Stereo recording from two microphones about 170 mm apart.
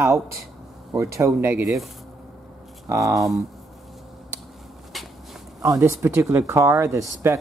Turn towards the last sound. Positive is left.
turn(degrees=-15)  # may be behind; listen again after turning